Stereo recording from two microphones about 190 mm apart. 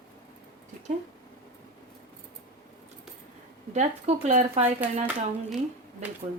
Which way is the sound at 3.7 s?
40° right (ahead or behind).